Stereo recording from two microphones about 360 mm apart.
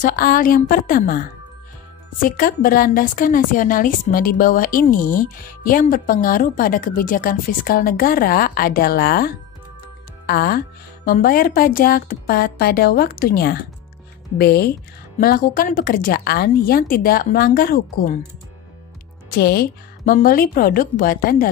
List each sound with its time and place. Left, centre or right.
0.0 s a woman's voice: left
2.2 s a woman's voice: left
19.3 s a woman's voice: left